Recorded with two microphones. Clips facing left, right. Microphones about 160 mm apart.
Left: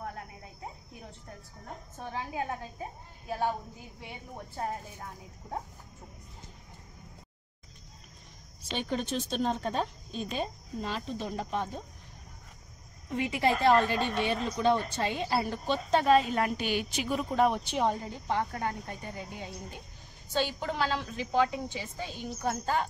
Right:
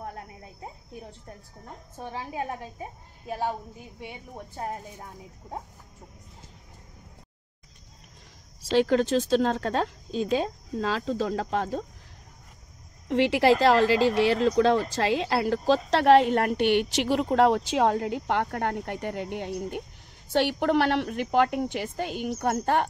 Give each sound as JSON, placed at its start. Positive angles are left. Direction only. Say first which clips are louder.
{"t": 8.6, "sound": "speech", "louder": "right 11 dB", "side_deg": -90}
{"t": 13.1, "sound": "a woman's voice", "louder": "right 8 dB", "side_deg": -80}